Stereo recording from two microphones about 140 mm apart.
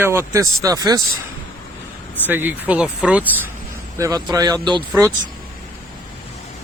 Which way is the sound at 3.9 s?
25° right (ahead or behind).